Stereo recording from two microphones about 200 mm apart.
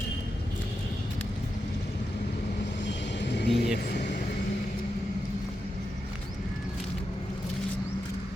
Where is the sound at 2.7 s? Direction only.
60° left (ahead or behind).